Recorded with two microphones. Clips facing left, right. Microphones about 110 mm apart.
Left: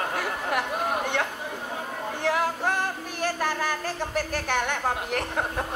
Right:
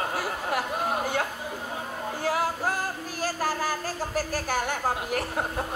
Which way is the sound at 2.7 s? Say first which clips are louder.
Left 2 dB; 60° left (ahead or behind).